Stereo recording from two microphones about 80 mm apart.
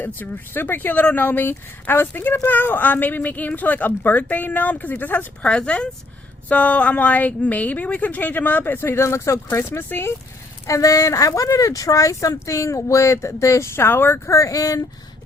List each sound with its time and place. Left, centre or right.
0.0 s speech: left
5.4 s speech: centre; by 10.1 s left
10.7 s speech: left